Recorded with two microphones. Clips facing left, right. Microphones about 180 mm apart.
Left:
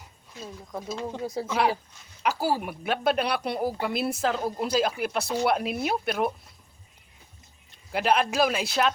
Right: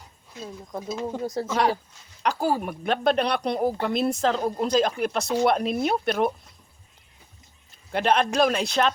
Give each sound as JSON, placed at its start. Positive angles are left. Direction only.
{"t": 0.7, "sound": "speech", "side_deg": -5}
{"t": 1.3, "sound": "speech", "side_deg": 10}
{"t": 7.9, "sound": "speech", "side_deg": 5}